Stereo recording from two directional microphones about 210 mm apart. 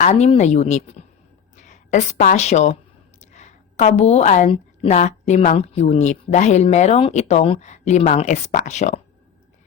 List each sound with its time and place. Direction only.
0.0 s a woman's voice: 30° left (ahead or behind)